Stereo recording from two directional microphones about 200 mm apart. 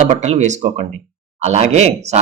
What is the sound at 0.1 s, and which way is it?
Speech, 35° right (ahead or behind).